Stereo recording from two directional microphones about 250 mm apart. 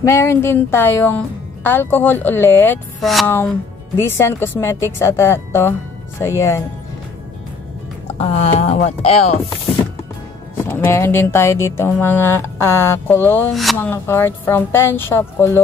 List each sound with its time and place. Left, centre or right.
0.0 s speech: centre
8.2 s speech: left
10.6 s speech: centre